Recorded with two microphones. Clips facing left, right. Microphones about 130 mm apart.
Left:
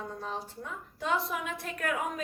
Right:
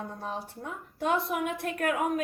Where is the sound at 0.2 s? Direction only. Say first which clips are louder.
Right 2 dB; 55° right (ahead or behind).